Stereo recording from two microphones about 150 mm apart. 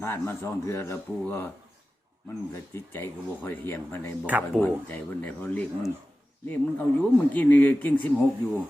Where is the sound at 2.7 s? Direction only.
15° left (ahead or behind).